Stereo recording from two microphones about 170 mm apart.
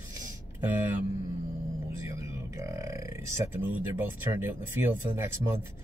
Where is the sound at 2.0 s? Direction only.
15° right (ahead or behind).